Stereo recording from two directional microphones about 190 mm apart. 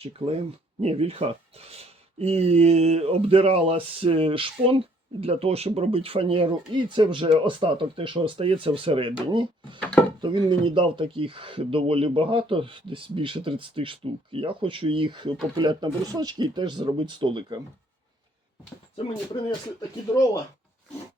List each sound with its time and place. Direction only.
0.0 s speech: 30° right (ahead or behind)